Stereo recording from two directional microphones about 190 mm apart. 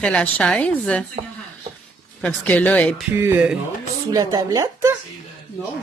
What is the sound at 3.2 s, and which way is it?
Speech, 10° right (ahead or behind).